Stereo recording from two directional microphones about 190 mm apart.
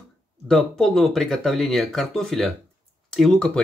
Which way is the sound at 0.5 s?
Centre (ahead or behind).